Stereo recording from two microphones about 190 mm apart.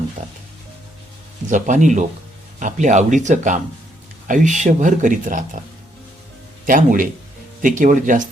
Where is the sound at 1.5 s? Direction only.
40° right (ahead or behind).